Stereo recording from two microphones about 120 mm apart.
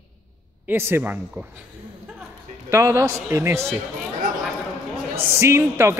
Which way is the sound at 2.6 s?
25° right (ahead or behind).